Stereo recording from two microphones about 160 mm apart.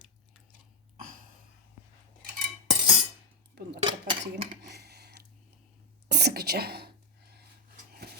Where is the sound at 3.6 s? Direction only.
90° right.